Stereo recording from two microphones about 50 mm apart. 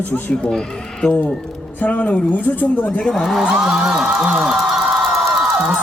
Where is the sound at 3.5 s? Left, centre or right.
Centre.